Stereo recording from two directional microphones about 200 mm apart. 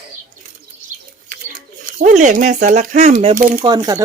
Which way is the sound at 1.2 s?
40° right (ahead or behind).